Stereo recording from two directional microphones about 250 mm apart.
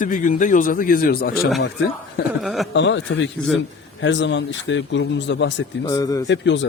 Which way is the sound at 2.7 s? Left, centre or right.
Left.